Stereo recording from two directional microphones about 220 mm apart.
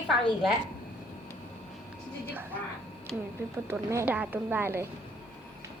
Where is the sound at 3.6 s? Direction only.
10° right (ahead or behind).